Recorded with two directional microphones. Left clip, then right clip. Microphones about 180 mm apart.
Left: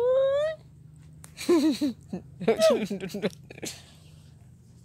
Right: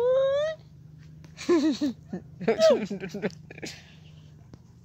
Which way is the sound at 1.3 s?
20° left (ahead or behind).